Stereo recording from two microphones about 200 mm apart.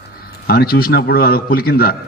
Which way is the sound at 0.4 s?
50° left (ahead or behind).